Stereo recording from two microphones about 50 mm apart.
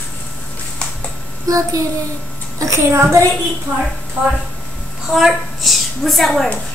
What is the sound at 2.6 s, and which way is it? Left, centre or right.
Speech, right.